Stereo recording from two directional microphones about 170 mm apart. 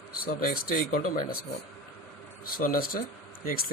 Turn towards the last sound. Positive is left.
turn(degrees=55)  # may be behind; listen again after turning